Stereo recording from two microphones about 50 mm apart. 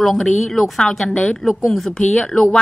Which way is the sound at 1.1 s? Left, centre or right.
Left.